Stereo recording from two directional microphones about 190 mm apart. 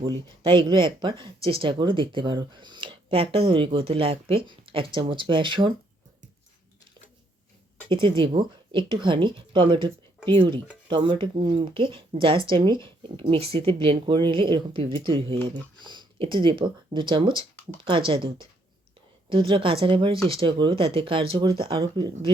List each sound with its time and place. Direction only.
0.0 s speech: 25° right (ahead or behind)
7.9 s speech: 25° right (ahead or behind)